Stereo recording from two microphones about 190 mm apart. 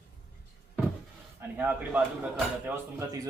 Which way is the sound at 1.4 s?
10° right (ahead or behind).